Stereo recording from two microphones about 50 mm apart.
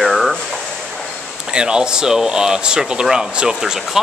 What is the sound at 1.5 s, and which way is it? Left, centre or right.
Speech, centre.